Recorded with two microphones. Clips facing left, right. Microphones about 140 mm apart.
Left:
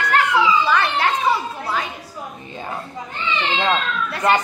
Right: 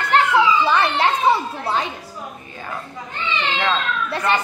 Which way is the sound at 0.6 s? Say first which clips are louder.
Right 1 dB; 25° right (ahead or behind).